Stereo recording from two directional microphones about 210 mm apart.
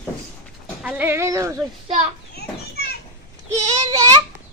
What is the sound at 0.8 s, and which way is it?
Speech, 10° right (ahead or behind).